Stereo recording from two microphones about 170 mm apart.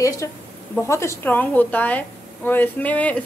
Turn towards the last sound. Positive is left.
turn(degrees=10)  # may be behind; listen again after turning